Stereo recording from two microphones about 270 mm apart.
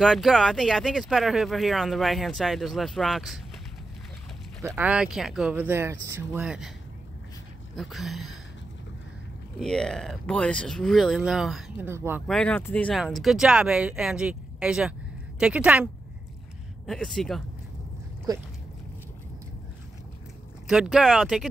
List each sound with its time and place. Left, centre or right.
0.0 s speech: centre
4.6 s speech: centre
7.7 s speech: centre
9.6 s speech: centre
12.3 s speech: centre
20.6 s speech: centre